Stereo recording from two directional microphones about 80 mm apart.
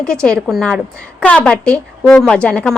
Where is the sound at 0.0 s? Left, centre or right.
Centre.